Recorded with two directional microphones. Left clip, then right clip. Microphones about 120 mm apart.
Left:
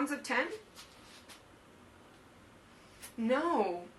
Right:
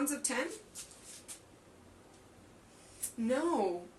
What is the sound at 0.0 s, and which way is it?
Speech, 25° right (ahead or behind).